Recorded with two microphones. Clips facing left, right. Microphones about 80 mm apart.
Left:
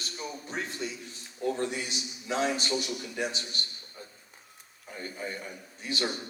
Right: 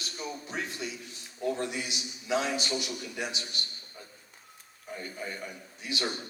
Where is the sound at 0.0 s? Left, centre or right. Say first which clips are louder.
Even; left.